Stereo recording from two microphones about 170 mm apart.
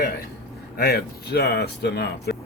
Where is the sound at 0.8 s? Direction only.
70° left (ahead or behind).